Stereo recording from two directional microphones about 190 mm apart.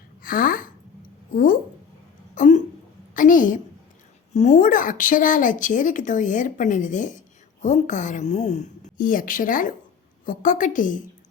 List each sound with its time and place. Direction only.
0.2 s speech: 50° left (ahead or behind)
2.3 s a sound: 40° left (ahead or behind)
3.2 s a woman's voice: 45° left (ahead or behind)